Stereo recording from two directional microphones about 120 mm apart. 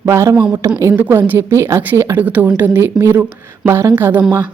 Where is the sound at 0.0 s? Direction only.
20° right (ahead or behind).